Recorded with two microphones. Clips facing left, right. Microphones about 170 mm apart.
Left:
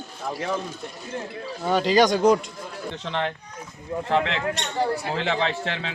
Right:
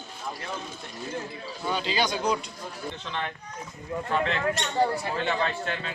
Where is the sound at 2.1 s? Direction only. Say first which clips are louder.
Left 9 dB; 45° left (ahead or behind).